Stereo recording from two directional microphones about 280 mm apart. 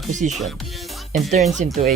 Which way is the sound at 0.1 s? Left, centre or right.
Right.